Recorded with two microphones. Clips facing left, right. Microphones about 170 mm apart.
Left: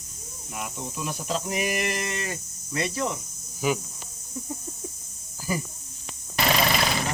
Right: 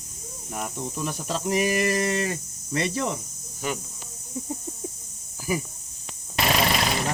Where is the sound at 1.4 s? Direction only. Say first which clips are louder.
Right 8 dB; 35° right (ahead or behind).